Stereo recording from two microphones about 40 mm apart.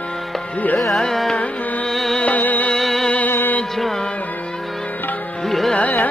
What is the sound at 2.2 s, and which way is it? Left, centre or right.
Music, left.